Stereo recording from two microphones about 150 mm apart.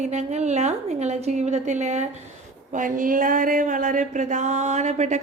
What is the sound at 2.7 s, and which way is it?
Speech, 60° right (ahead or behind).